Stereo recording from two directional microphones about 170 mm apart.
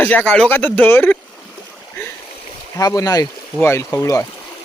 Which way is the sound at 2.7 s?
20° left (ahead or behind).